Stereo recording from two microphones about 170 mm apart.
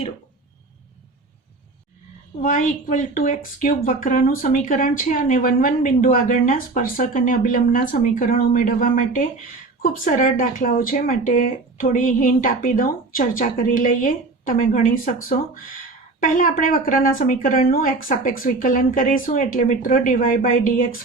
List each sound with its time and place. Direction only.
2.4 s a woman's voice: 50° left (ahead or behind)